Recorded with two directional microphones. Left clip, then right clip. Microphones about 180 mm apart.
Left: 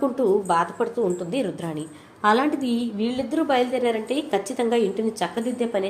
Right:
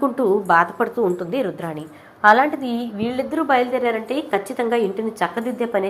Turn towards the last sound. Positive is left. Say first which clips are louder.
# right 3 dB
turn(degrees=0)  # may be behind; listen again after turning